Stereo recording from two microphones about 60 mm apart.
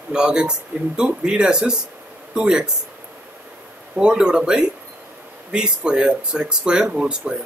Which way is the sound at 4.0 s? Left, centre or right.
Centre.